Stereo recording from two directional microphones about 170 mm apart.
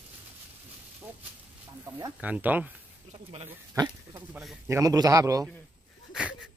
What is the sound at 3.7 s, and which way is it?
Speech, 25° right (ahead or behind).